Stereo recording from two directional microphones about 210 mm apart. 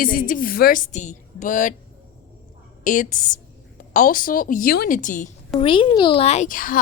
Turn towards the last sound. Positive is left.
turn(degrees=40)  # may be behind; listen again after turning